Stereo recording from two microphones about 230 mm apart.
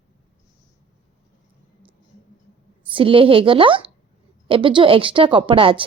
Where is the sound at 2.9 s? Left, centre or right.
Right.